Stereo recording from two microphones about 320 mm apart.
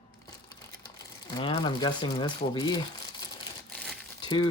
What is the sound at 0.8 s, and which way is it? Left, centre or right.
Speech, centre.